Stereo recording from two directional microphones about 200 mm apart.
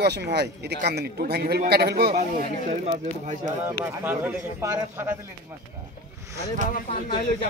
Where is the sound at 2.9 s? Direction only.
35° right (ahead or behind).